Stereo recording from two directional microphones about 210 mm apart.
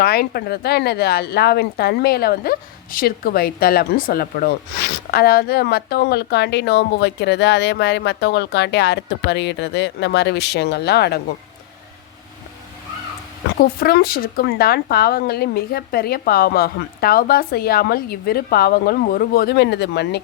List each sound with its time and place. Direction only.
0.0 s speech: 45° left (ahead or behind)
13.6 s speech: 45° left (ahead or behind)